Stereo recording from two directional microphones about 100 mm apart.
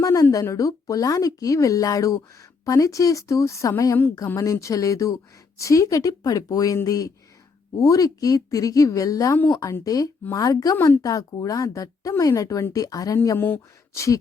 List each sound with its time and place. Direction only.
0.0 s speech: 30° left (ahead or behind)
10.8 s a woman's voice: 20° left (ahead or behind)
11.0 s speech: 35° left (ahead or behind)
13.4 s speech: 25° left (ahead or behind)